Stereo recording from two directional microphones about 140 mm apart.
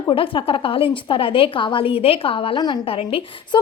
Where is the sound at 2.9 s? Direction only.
40° left (ahead or behind).